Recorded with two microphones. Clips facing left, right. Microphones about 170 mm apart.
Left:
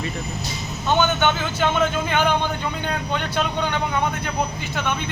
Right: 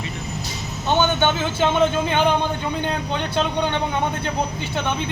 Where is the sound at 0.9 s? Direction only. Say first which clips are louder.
Right 1 dB; 25° right (ahead or behind).